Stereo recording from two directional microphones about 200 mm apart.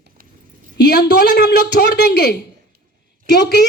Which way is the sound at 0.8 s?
55° left (ahead or behind).